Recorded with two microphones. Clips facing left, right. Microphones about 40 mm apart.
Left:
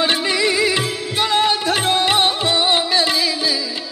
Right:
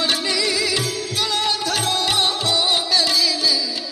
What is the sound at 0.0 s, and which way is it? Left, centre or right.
Music, left.